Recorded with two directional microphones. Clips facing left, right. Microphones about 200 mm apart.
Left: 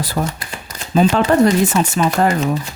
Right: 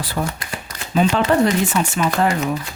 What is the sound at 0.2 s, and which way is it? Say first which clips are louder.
Speech: even; 40° left (ahead or behind).